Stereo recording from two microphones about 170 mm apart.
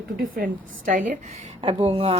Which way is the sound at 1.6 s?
30° right (ahead or behind).